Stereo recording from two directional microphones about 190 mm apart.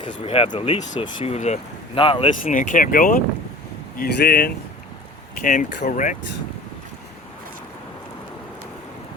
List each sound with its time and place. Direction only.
0.0 s speech: 30° left (ahead or behind)
2.5 s speech: 45° left (ahead or behind)
5.4 s speech: 40° left (ahead or behind)